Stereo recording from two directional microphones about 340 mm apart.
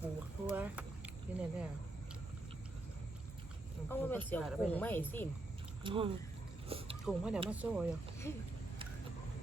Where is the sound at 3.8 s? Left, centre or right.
Centre.